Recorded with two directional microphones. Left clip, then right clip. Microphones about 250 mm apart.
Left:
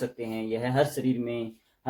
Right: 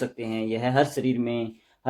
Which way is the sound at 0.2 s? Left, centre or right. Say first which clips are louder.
Right 3 dB; right.